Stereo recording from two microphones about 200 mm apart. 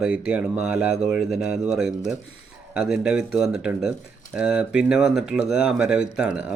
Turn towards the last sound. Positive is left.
turn(degrees=-5)  # may be behind; listen again after turning